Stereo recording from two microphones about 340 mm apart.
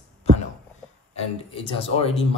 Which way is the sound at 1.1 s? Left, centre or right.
Centre.